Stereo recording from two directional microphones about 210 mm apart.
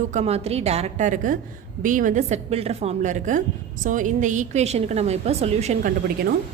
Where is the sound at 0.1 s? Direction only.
30° right (ahead or behind).